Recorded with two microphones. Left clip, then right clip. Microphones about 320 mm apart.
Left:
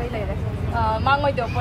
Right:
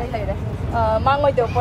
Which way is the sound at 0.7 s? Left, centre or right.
Right.